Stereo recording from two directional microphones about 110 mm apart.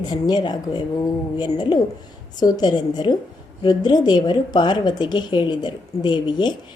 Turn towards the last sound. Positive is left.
turn(degrees=45)  # may be behind; listen again after turning